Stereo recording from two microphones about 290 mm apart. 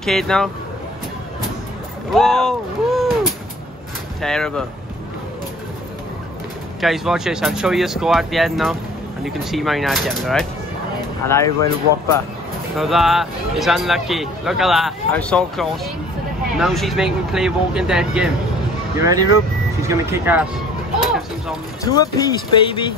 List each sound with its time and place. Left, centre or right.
0.0 s speech: centre
2.1 s speech: centre
6.8 s speech: centre
11.2 s speech: centre
12.7 s speech: centre
21.8 s speech: centre